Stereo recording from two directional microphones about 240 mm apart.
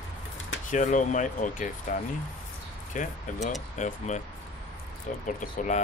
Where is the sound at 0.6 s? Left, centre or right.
Left.